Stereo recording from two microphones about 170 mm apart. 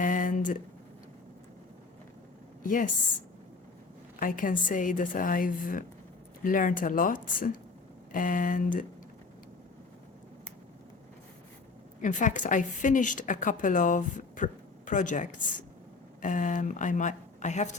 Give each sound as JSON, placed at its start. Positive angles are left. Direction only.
{"t": 0.0, "sound": "a sound", "side_deg": 50}
{"t": 2.6, "sound": "a woman's voice", "side_deg": 50}
{"t": 4.2, "sound": "a woman's voice", "side_deg": 55}
{"t": 12.0, "sound": "a woman's voice", "side_deg": 50}